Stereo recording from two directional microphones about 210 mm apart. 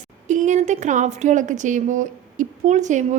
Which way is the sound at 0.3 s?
35° right (ahead or behind).